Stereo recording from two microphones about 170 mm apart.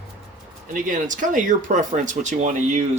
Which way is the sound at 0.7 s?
50° right (ahead or behind).